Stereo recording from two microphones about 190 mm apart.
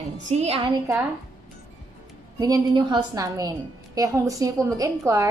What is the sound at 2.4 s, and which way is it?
A woman's voice, 20° right (ahead or behind).